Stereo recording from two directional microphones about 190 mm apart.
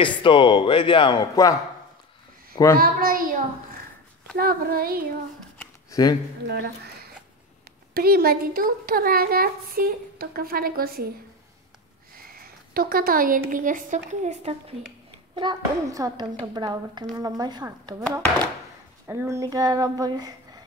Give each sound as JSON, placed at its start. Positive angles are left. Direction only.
{"t": 0.0, "sound": "speech", "side_deg": 25}
{"t": 2.5, "sound": "speech", "side_deg": 15}
{"t": 2.8, "sound": "speech", "side_deg": -50}
{"t": 5.6, "sound": "a sound", "side_deg": 20}
{"t": 6.4, "sound": "speech", "side_deg": -60}
{"t": 7.9, "sound": "speech", "side_deg": -55}
{"t": 12.3, "sound": "a sound", "side_deg": -50}
{"t": 13.5, "sound": "speech", "side_deg": -45}
{"t": 15.3, "sound": "speech", "side_deg": -20}
{"t": 19.0, "sound": "speech", "side_deg": -15}